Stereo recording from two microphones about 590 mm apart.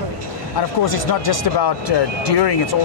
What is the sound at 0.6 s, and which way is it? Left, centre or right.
Speech, left.